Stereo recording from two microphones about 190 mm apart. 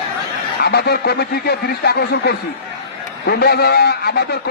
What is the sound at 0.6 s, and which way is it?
Speech, 55° left (ahead or behind).